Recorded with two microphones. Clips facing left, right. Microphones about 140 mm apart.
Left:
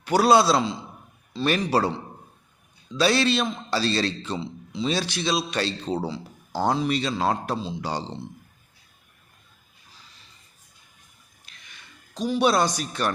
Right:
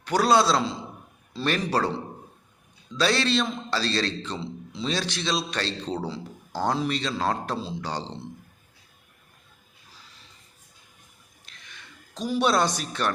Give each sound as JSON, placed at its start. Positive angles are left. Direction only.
{"t": 0.0, "sound": "a man's voice", "side_deg": 10}
{"t": 3.0, "sound": "a man's voice", "side_deg": 10}
{"t": 11.5, "sound": "a sound", "side_deg": 5}
{"t": 12.1, "sound": "speech", "side_deg": 0}